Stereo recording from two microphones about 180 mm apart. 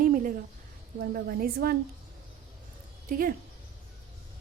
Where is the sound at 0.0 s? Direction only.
50° right (ahead or behind).